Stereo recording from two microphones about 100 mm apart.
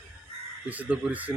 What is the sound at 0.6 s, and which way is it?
Speech, 15° right (ahead or behind).